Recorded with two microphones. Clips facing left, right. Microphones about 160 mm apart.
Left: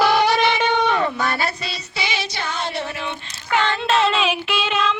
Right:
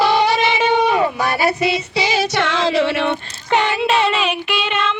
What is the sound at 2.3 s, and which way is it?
Music, 90° right.